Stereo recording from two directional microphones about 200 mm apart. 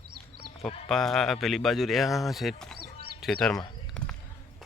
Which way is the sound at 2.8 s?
50° right (ahead or behind).